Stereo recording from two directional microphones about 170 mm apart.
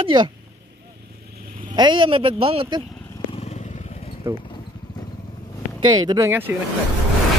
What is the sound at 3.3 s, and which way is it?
Vehicle, 40° left (ahead or behind).